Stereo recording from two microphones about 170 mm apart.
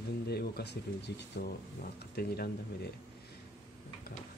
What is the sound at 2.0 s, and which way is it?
Speech, 65° left (ahead or behind).